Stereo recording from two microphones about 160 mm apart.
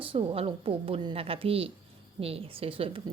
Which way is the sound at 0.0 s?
35° right (ahead or behind).